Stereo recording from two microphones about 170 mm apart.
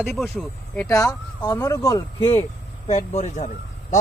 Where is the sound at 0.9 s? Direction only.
20° left (ahead or behind).